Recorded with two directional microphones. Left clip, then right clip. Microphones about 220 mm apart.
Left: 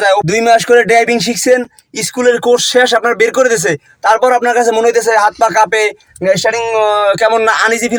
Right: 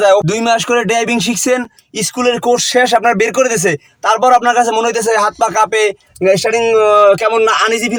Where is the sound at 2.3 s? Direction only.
5° right (ahead or behind).